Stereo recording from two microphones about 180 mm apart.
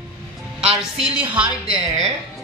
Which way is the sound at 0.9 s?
5° right (ahead or behind).